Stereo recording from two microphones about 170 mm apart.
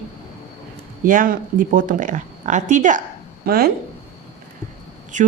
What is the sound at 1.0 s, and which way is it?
Speech, 50° right (ahead or behind).